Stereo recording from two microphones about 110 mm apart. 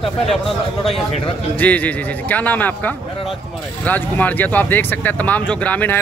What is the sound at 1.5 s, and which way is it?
Speech, 15° left (ahead or behind).